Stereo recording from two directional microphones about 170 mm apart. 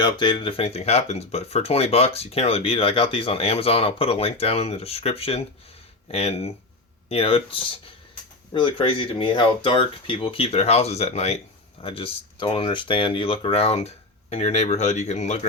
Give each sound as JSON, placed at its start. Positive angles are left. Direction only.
{"t": 0.0, "sound": "speech", "side_deg": 25}